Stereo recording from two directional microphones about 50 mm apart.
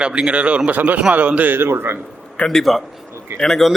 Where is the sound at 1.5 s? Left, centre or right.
Right.